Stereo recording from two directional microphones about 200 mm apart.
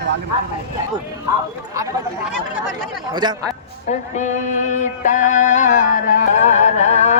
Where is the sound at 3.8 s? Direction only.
35° left (ahead or behind).